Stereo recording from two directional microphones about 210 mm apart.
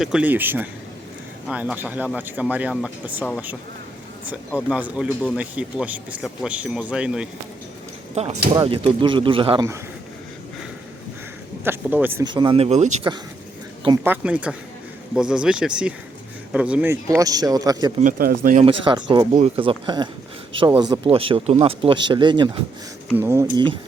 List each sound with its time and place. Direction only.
0.0 s a man's voice: 5° right (ahead or behind)
4.3 s speech: 5° right (ahead or behind)
8.1 s speech: 30° right (ahead or behind)
11.6 s a man's voice: 10° right (ahead or behind)
12.2 s speech: 20° right (ahead or behind)
14.0 s a man's voice: 5° right (ahead or behind)
18.0 s speech: 45° right (ahead or behind)
18.6 s a man's voice: 25° right (ahead or behind)